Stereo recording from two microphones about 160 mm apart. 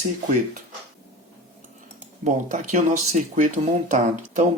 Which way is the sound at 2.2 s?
50° right (ahead or behind).